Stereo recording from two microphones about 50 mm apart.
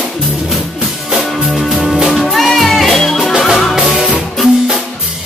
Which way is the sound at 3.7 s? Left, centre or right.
Centre.